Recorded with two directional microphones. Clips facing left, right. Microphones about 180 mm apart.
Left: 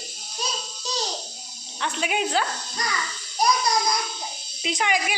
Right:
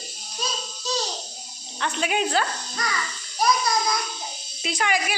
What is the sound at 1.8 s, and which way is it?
Speech, 5° left (ahead or behind).